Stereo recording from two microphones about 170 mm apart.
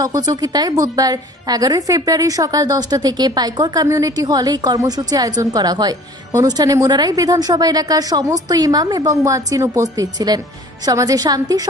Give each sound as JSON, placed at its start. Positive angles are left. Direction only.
{"t": 0.0, "sound": "a woman's voice", "side_deg": -20}